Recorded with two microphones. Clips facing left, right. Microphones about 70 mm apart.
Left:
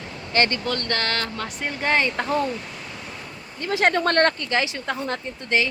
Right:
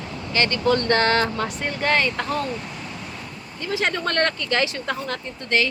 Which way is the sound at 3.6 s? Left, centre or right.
Left.